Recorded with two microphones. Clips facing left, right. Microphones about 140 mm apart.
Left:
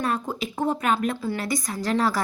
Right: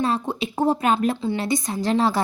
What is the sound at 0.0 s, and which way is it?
Speech, 30° right (ahead or behind).